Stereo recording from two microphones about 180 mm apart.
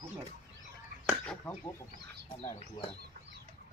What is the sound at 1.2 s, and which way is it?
Speech, 10° left (ahead or behind).